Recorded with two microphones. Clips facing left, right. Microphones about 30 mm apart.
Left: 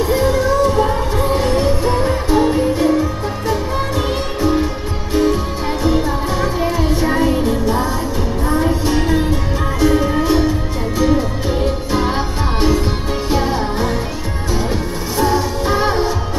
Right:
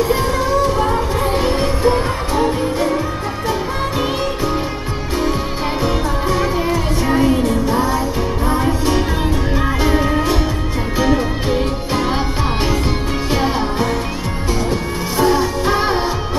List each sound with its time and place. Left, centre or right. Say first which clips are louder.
0.1 s music: left 1 dB; centre
5.9 s music: left 4 dB; centre
6.6 s music: left 1 dB; centre
8.5 s music: left 1 dB; centre
9.8 s music: left 4 dB; centre
13.3 s music: even; centre
15.1 s music: right 1 dB; centre